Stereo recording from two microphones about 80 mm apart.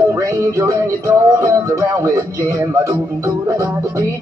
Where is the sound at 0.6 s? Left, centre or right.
Right.